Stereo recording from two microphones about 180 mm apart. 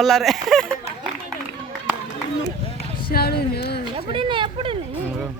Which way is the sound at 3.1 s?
60° left (ahead or behind).